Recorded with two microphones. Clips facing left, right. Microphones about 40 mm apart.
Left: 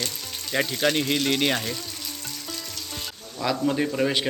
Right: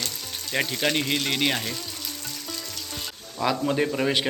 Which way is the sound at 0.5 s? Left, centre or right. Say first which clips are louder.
Left 1 dB; centre.